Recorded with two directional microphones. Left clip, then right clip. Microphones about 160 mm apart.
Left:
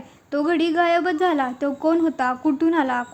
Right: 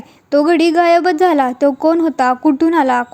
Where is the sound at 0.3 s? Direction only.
35° right (ahead or behind).